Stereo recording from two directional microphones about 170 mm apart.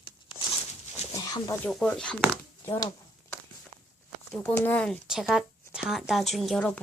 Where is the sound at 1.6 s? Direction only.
5° left (ahead or behind).